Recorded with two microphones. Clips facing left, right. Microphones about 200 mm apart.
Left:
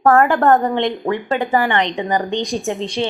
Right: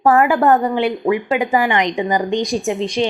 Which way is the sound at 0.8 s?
10° right (ahead or behind).